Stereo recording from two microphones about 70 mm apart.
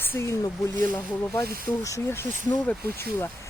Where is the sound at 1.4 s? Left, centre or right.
Left.